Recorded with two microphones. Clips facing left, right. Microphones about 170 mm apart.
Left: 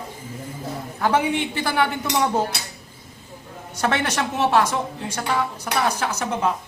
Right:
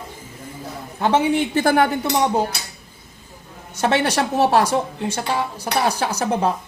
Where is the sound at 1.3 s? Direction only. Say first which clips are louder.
Right 5 dB; 45° right (ahead or behind).